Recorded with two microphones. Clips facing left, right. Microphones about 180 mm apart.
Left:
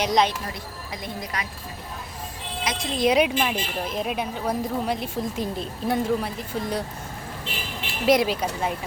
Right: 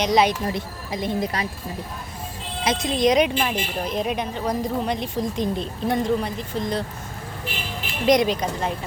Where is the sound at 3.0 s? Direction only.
5° left (ahead or behind).